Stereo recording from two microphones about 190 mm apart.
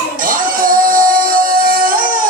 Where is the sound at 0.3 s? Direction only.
45° right (ahead or behind).